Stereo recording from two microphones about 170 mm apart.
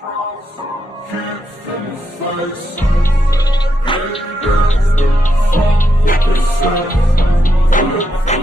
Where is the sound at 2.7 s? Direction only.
15° left (ahead or behind).